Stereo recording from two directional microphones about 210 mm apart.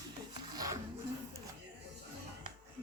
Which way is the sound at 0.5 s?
15° right (ahead or behind).